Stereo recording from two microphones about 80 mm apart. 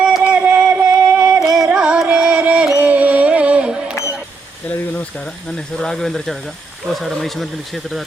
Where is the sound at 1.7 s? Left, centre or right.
Centre.